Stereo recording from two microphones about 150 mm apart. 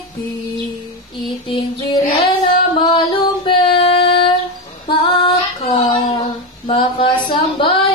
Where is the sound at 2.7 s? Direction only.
35° left (ahead or behind).